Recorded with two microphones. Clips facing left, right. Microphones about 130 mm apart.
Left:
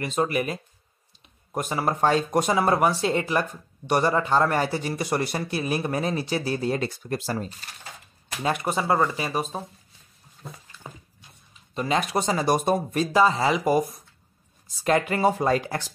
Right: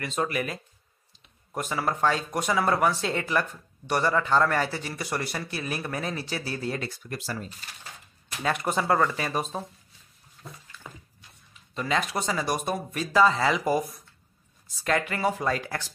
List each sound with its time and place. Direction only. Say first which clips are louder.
0.0 s speech: left 4 dB; 20° left (ahead or behind)
2.7 s speech: left 3 dB; 20° left (ahead or behind)
11.7 s speech: left 3 dB; 20° left (ahead or behind)